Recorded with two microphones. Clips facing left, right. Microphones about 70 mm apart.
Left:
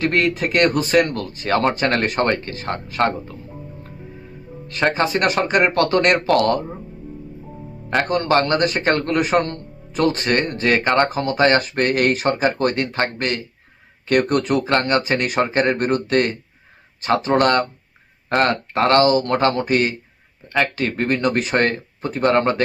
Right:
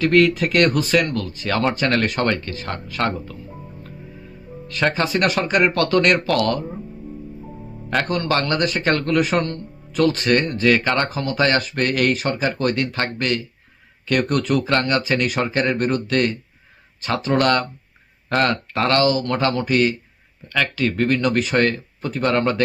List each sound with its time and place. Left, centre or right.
0.0 s speech: left
4.7 s speech: left
8.0 s speech: left